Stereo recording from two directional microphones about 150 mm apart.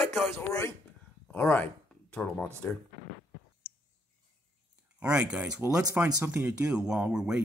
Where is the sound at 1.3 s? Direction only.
10° left (ahead or behind).